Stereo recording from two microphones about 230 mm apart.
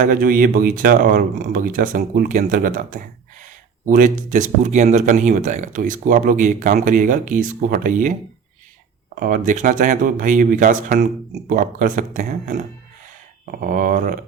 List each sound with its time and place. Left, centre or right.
0.0 s speech: right
9.1 s speech: right